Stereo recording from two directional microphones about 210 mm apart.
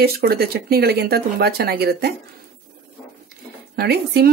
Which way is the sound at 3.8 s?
50° right (ahead or behind).